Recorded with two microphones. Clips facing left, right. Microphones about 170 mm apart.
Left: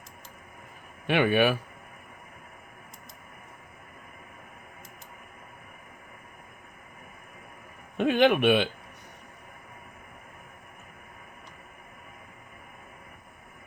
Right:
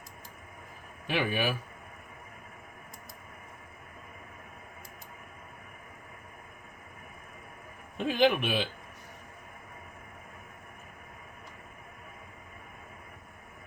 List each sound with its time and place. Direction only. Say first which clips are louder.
1.0 s speech: left 7 dB; 65° left (ahead or behind)
7.9 s speech: left 4 dB; 65° left (ahead or behind)